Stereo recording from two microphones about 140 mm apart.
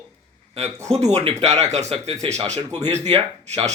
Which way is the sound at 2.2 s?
40° right (ahead or behind).